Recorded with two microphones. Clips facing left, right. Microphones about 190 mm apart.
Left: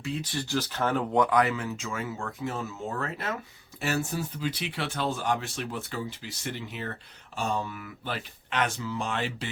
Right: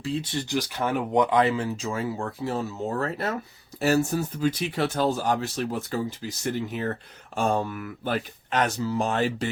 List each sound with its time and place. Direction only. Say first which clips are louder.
0.0 s speech: right 4 dB; 30° right (ahead or behind)